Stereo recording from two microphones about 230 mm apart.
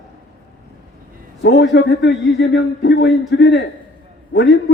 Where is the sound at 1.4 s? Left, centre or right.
Left.